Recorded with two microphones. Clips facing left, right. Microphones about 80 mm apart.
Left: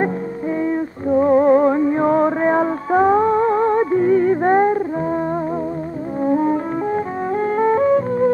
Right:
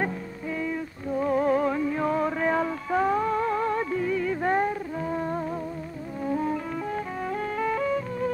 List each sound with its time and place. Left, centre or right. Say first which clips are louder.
0.6 s music: left 9 dB; left
6.2 s music: left 10 dB; left